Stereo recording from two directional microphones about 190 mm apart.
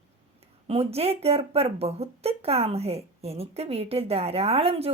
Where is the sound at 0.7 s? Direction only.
30° right (ahead or behind).